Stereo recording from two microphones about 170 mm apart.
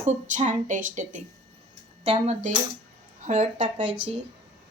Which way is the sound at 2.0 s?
35° right (ahead or behind).